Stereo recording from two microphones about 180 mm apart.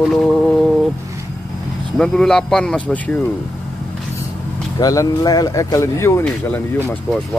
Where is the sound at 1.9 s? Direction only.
5° left (ahead or behind).